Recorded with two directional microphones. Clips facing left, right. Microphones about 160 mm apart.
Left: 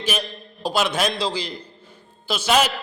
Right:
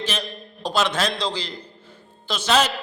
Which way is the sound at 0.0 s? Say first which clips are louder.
Left 2 dB; 10° left (ahead or behind).